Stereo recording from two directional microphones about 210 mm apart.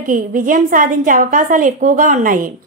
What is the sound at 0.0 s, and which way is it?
A woman's voice, 40° right (ahead or behind).